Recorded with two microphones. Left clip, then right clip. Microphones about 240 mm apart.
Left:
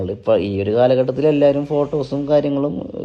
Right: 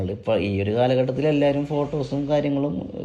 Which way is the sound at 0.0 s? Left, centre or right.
Centre.